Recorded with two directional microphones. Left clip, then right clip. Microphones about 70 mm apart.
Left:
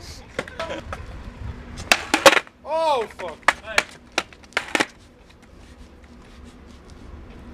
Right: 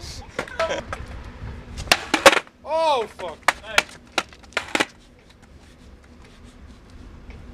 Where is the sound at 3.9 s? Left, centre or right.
Centre.